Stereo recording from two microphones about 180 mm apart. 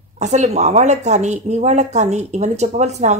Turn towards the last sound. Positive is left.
turn(degrees=-40)  # may be behind; listen again after turning